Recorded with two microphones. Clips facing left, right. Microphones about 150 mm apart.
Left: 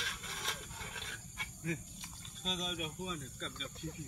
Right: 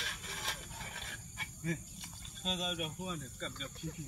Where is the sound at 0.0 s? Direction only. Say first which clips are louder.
Even; centre (ahead or behind).